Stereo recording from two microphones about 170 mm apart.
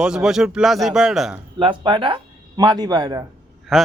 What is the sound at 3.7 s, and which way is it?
Speech, centre (ahead or behind).